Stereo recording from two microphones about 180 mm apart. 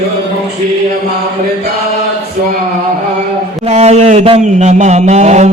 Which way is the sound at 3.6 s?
35° right (ahead or behind).